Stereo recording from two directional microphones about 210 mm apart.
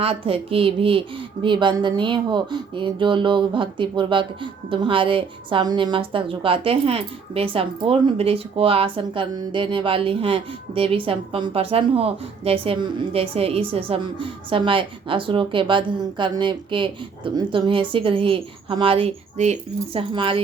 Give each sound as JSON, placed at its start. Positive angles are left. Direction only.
{"t": 0.0, "sound": "a woman's voice", "side_deg": -25}